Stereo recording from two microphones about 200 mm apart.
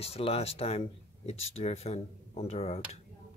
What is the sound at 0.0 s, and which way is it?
Speech, 30° left (ahead or behind).